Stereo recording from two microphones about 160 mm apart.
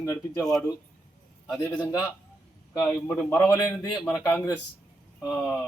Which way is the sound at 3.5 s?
20° left (ahead or behind).